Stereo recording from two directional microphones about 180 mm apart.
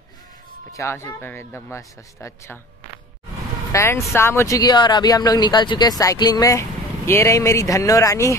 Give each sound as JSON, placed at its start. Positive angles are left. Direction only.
{"t": 0.7, "sound": "a man's voice", "side_deg": 15}
{"t": 3.7, "sound": "a man's voice", "side_deg": 15}